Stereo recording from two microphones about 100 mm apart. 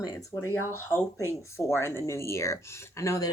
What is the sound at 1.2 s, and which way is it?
Speech, 25° left (ahead or behind).